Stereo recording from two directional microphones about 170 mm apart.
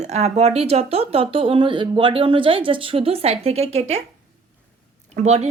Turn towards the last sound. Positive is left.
turn(degrees=-40)  # may be behind; listen again after turning